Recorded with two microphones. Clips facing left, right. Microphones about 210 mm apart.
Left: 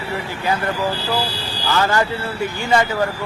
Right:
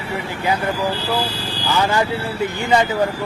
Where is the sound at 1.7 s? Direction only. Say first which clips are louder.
Even; 15° right (ahead or behind).